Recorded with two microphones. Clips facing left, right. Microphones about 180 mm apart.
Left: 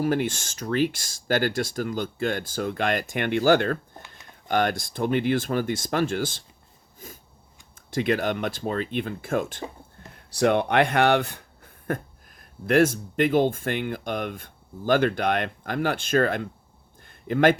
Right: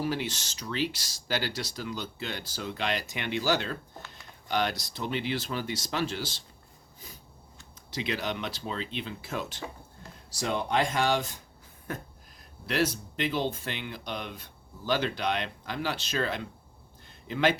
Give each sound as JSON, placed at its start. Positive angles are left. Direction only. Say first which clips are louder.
{"t": 0.0, "sound": "speech", "louder": "left 7 dB", "side_deg": 50}
{"t": 10.2, "sound": "speech", "louder": "left 10 dB", "side_deg": 60}
{"t": 17.0, "sound": "a sound", "louder": "left 7 dB", "side_deg": 55}